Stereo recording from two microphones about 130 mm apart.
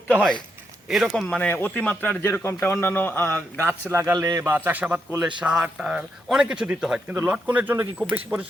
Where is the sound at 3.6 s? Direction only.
20° right (ahead or behind).